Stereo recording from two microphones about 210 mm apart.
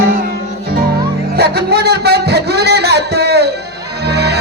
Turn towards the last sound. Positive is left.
turn(degrees=-50)  # may be behind; listen again after turning